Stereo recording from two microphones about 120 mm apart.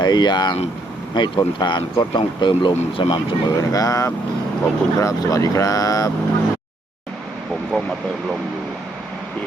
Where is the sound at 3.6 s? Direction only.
30° left (ahead or behind).